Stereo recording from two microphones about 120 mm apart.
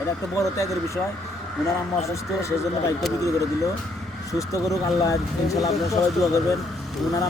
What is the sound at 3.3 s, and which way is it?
Speech, 25° left (ahead or behind).